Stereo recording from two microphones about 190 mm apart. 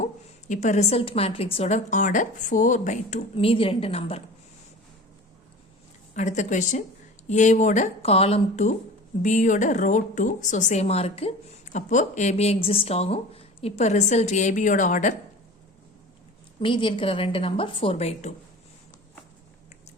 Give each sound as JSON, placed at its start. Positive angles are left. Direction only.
{"t": 0.0, "sound": "a woman's voice", "side_deg": 40}
{"t": 6.1, "sound": "a woman's voice", "side_deg": 40}
{"t": 16.6, "sound": "a woman's voice", "side_deg": 25}